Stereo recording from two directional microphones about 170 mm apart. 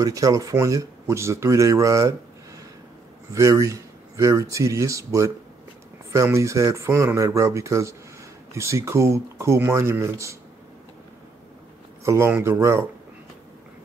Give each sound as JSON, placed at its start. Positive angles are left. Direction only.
{"t": 0.0, "sound": "speech", "side_deg": -20}
{"t": 12.0, "sound": "speech", "side_deg": -15}